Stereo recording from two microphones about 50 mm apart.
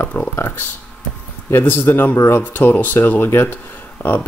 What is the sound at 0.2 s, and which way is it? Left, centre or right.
Speech, left.